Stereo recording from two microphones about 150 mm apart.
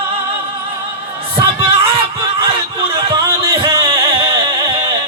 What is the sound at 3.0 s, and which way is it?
Music, 35° right (ahead or behind).